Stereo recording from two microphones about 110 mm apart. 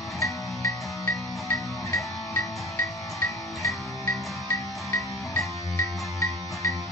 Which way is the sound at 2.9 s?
30° left (ahead or behind).